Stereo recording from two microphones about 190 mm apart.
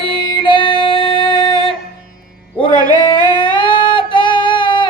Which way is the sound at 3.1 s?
25° left (ahead or behind).